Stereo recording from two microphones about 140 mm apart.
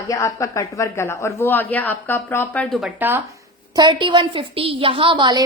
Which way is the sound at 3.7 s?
30° right (ahead or behind).